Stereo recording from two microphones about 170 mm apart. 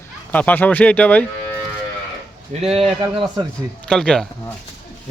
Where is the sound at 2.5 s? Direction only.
35° right (ahead or behind).